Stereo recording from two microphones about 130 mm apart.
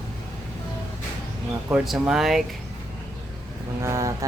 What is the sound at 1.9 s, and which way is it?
Speech, 5° right (ahead or behind).